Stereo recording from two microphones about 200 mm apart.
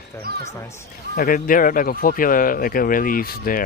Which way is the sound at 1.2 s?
45° left (ahead or behind).